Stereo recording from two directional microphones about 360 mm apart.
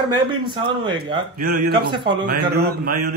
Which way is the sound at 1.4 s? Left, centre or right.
Right.